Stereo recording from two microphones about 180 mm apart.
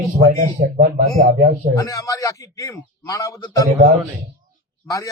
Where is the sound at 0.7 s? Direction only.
55° right (ahead or behind).